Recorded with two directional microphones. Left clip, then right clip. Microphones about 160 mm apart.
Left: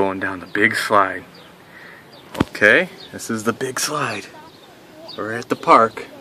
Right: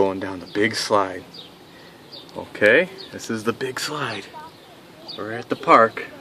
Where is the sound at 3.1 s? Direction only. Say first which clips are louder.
Left 4 dB; 20° left (ahead or behind).